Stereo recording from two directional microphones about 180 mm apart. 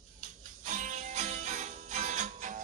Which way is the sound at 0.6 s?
45° right (ahead or behind).